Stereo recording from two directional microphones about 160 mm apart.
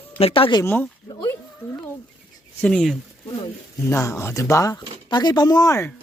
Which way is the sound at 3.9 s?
15° left (ahead or behind).